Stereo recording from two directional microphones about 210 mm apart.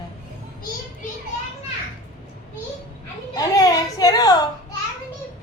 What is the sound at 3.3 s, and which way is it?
A child's voice, 15° left (ahead or behind).